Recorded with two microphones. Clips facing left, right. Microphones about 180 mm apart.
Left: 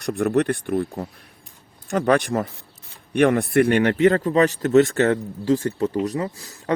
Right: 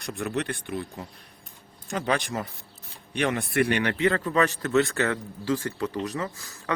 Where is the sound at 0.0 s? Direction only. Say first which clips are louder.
Left 10 dB; 60° left (ahead or behind); by 4.9 s 40° left (ahead or behind).